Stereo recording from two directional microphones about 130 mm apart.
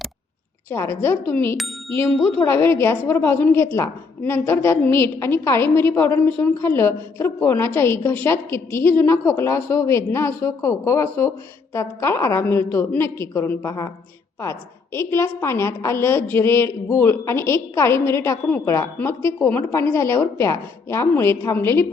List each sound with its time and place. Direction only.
0.7 s a woman's voice: 20° left (ahead or behind)
14.9 s a woman's voice: 20° left (ahead or behind)